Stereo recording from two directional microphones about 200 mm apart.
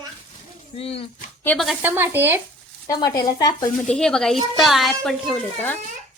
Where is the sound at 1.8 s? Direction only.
10° right (ahead or behind).